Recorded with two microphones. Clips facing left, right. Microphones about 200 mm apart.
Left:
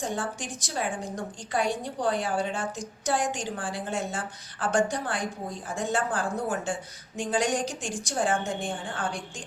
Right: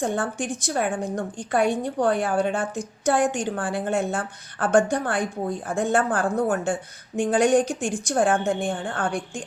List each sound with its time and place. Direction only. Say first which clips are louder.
0.0 s a woman's voice: right 6 dB; 55° right (ahead or behind)